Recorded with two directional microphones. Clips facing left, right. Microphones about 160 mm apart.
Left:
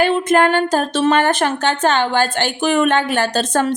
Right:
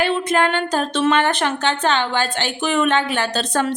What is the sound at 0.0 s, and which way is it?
A woman's voice, 45° left (ahead or behind).